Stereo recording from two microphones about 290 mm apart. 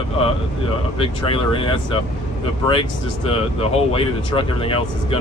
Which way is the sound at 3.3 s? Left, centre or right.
Centre.